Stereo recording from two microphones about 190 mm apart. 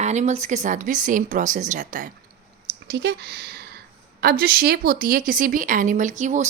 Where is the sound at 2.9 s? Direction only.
60° right (ahead or behind).